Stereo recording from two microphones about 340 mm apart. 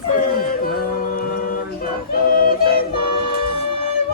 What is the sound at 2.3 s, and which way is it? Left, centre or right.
Yodeling, left.